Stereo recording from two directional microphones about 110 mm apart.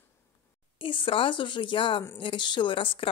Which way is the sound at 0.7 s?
50° left (ahead or behind).